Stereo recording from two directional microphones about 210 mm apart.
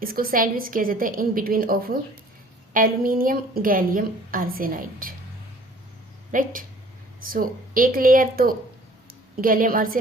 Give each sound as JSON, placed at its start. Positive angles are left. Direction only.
{"t": 0.0, "sound": "a woman's voice", "side_deg": -45}
{"t": 6.3, "sound": "a woman's voice", "side_deg": -40}